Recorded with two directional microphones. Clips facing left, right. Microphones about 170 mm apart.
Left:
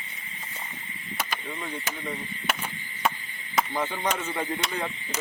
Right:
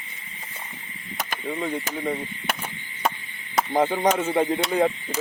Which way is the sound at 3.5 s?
50° right (ahead or behind).